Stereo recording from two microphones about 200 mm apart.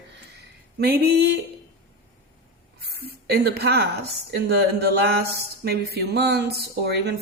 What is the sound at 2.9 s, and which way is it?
Speech, 50° right (ahead or behind).